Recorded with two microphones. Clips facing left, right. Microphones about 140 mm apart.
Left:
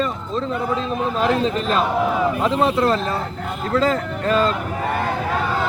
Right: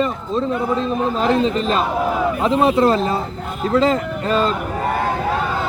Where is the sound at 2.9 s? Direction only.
10° right (ahead or behind).